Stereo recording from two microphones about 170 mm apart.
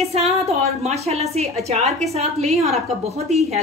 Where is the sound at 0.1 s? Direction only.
40° right (ahead or behind).